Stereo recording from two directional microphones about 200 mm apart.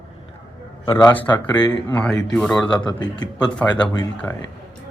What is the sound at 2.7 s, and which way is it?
Speech, 20° left (ahead or behind).